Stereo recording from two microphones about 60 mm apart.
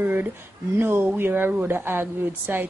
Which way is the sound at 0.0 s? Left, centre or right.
Right.